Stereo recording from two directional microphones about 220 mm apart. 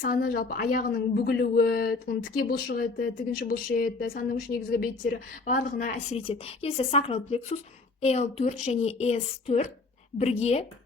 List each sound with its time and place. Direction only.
0.0 s a woman's voice: 40° left (ahead or behind)